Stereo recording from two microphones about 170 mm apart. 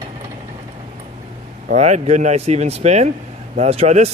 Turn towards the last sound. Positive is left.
turn(degrees=-40)  # may be behind; listen again after turning